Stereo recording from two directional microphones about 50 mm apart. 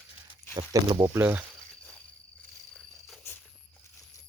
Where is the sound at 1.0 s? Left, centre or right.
Right.